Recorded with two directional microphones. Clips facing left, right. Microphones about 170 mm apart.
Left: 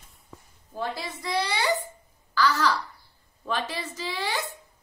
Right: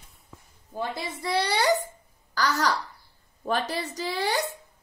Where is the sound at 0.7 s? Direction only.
25° right (ahead or behind).